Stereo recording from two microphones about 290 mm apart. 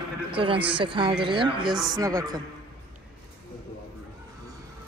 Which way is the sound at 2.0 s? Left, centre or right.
Centre.